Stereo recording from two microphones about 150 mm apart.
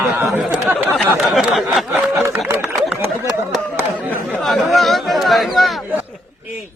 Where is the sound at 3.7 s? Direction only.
15° right (ahead or behind).